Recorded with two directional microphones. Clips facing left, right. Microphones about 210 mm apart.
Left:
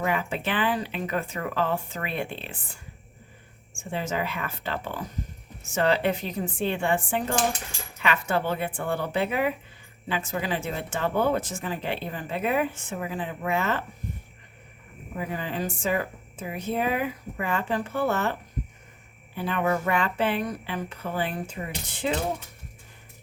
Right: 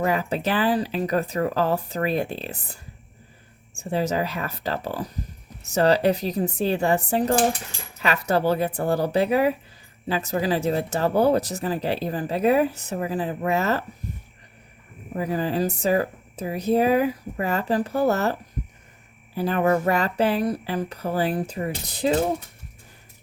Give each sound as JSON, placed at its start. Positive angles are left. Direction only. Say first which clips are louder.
{"t": 0.0, "sound": "speech", "louder": "right 4 dB", "side_deg": -40}
{"t": 3.8, "sound": "speech", "louder": "right 6 dB", "side_deg": -40}
{"t": 15.1, "sound": "speech", "louder": "right 7 dB", "side_deg": -40}